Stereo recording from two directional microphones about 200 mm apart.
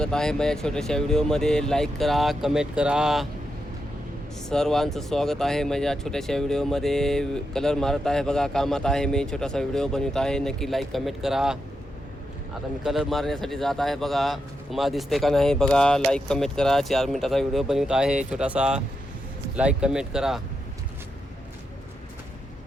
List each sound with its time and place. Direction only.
0.0 s speech: 5° left (ahead or behind)
4.4 s speech: centre (ahead or behind)
12.8 s speech: centre (ahead or behind)